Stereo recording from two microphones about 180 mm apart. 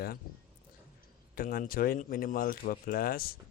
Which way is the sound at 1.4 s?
55° left (ahead or behind).